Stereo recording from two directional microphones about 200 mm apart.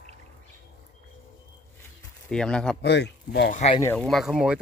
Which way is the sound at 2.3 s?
5° left (ahead or behind).